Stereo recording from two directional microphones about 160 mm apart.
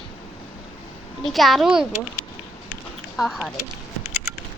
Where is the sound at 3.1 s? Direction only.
Centre (ahead or behind).